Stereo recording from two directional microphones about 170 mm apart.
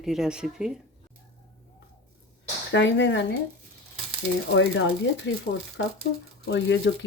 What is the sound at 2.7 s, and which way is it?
Speech, 90° left.